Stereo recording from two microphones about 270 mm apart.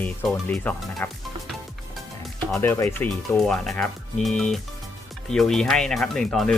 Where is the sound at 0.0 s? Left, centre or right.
Centre.